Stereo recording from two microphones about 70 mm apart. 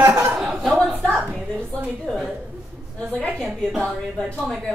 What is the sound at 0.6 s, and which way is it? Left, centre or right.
Speech, centre.